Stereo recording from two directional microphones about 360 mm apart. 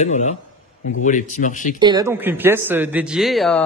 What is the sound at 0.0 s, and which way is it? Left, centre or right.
Speech, centre.